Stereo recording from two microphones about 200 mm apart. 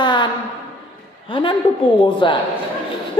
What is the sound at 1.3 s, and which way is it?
A man's voice, 25° left (ahead or behind).